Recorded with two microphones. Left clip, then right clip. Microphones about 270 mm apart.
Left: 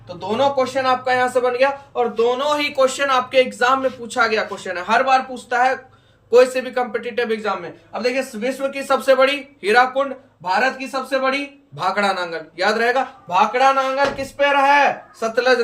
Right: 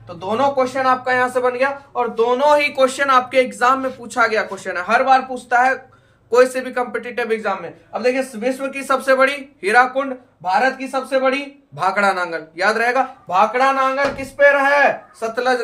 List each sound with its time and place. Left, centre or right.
0.2 s speech: centre
15.2 s speech: right